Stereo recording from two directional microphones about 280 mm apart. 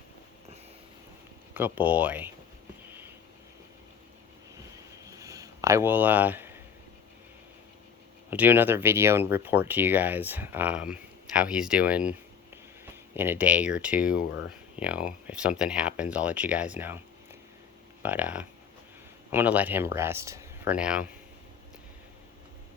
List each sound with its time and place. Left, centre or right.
1.5 s speech: centre
5.1 s a sound: centre
8.3 s speech: centre
14.2 s speech: left
14.8 s speech: centre
18.0 s speech: centre